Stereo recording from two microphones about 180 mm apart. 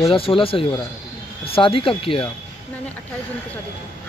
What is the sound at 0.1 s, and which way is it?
Speech, 30° left (ahead or behind).